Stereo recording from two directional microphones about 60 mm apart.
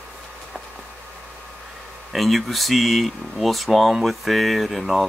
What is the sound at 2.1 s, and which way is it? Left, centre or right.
Speech, centre.